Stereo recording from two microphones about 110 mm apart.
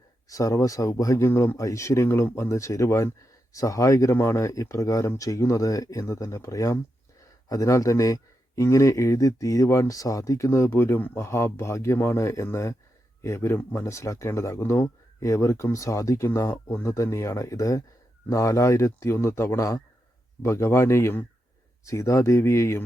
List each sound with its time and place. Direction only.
0.3 s speech: 30° left (ahead or behind)